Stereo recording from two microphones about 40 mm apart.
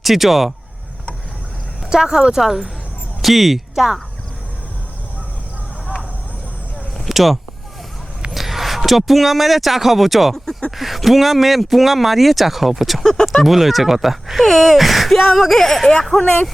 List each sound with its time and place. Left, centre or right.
0.0 s speech: centre
1.9 s speech: centre
7.1 s a man's voice: centre
16.2 s speech: left